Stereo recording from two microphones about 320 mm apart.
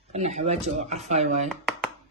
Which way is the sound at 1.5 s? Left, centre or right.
Centre.